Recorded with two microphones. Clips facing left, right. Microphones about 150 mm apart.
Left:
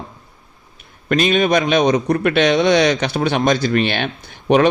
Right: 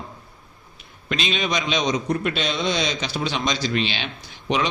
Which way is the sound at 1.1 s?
50° left (ahead or behind).